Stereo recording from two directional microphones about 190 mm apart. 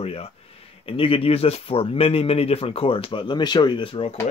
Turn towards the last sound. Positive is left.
turn(degrees=25)  # may be behind; listen again after turning